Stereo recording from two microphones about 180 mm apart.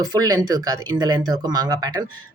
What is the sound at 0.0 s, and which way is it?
Speech, 20° right (ahead or behind).